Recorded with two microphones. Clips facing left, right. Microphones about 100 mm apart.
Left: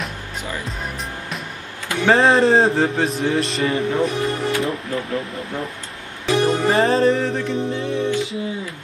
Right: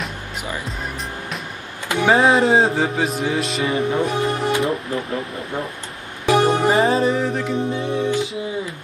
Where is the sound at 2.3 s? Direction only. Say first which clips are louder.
Left 1 dB; centre (ahead or behind).